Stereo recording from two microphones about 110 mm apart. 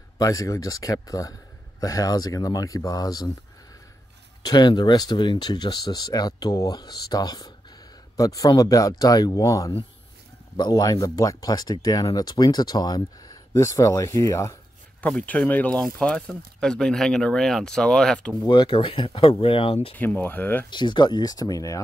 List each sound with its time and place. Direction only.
0.2 s speech: 30° left (ahead or behind)
4.4 s speech: 40° left (ahead or behind)
15.0 s speech: 10° left (ahead or behind)
18.5 s speech: 50° left (ahead or behind)
20.0 s speech: 15° left (ahead or behind)
20.7 s speech: 45° left (ahead or behind)